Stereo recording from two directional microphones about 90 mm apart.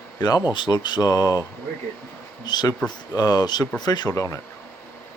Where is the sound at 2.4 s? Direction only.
50° left (ahead or behind); by 4.4 s 35° left (ahead or behind).